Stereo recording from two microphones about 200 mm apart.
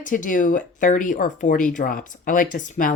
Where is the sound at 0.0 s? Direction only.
40° left (ahead or behind).